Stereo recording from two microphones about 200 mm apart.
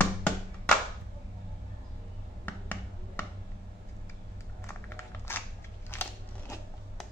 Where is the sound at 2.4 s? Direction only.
10° left (ahead or behind).